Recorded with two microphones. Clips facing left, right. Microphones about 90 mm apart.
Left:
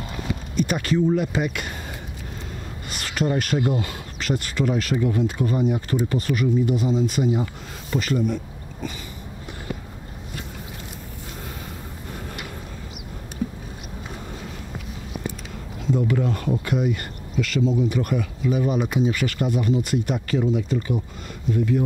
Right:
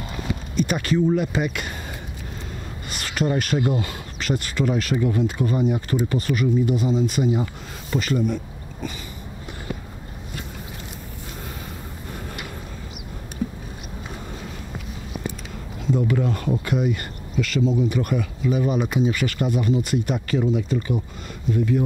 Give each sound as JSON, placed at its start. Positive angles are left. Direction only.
{"t": 0.3, "sound": "speech", "side_deg": -10}
{"t": 2.9, "sound": "speech", "side_deg": -10}
{"t": 16.1, "sound": "speech", "side_deg": -15}